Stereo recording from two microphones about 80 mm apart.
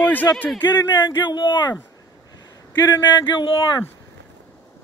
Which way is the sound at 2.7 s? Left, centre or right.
Left.